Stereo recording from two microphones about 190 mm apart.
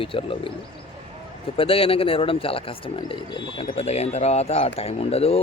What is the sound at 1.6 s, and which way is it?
Speech, 30° left (ahead or behind).